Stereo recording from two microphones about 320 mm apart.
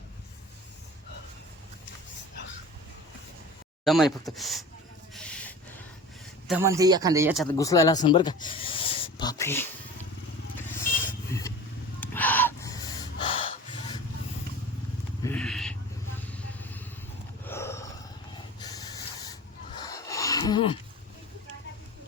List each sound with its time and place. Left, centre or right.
3.8 s speech: centre
5.1 s snort: centre
6.5 s speech: centre
7.5 s speech: centre
11.3 s vehicle: centre
11.9 s gasp: centre
15.2 s a sound: centre
17.4 s wild animals: centre
18.6 s rub: centre